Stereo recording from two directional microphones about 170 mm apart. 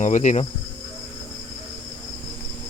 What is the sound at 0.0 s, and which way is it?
Insect, 45° left (ahead or behind).